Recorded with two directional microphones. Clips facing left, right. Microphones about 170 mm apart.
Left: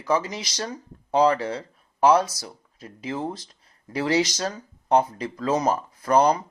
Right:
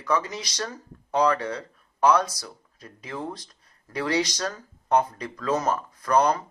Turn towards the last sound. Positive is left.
turn(degrees=25)  # may be behind; listen again after turning